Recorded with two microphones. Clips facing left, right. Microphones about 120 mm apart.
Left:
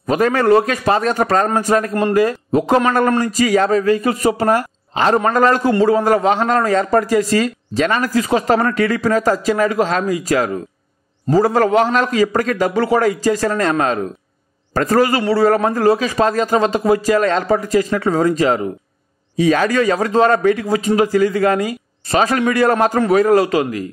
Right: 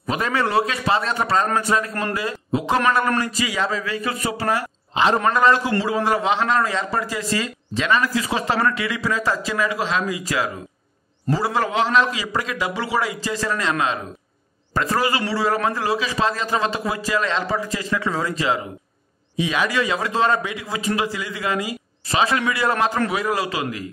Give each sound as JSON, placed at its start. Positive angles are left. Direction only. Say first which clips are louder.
{"t": 0.0, "sound": "a man's voice", "louder": "left 7 dB", "side_deg": 45}